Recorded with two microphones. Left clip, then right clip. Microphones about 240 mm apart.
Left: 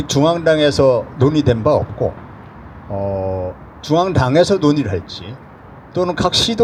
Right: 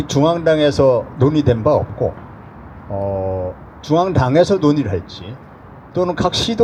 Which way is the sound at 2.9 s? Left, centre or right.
Left.